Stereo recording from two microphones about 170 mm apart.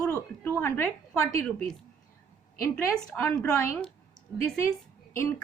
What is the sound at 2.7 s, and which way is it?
Speech, 10° left (ahead or behind).